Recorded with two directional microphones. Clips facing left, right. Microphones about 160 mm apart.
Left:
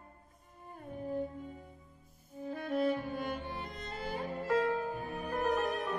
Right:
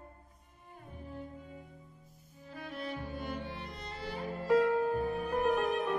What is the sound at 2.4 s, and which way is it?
Music, 50° left (ahead or behind).